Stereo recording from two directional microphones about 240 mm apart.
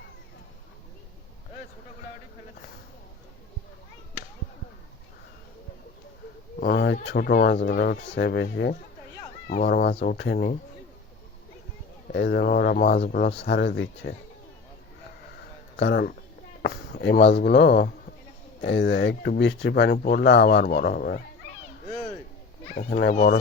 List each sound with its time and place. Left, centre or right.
6.6 s speech: left
12.0 s speech: left
15.8 s speech: left
22.8 s speech: left